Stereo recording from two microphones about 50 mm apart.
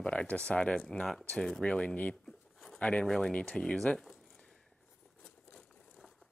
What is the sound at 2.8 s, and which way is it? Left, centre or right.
Speech, left.